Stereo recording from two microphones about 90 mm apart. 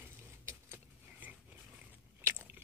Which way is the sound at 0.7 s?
20° right (ahead or behind).